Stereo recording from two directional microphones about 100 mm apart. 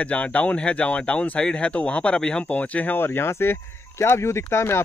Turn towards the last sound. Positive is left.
turn(degrees=25)  # may be behind; listen again after turning